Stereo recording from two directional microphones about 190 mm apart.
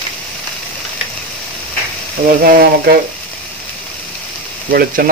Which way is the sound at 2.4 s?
50° right (ahead or behind).